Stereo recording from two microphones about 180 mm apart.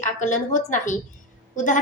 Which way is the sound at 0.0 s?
45° left (ahead or behind).